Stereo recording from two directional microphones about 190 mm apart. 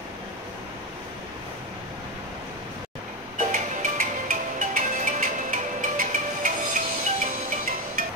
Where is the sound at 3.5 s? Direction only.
45° right (ahead or behind).